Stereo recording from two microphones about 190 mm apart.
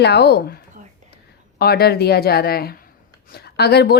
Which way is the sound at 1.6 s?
55° left (ahead or behind).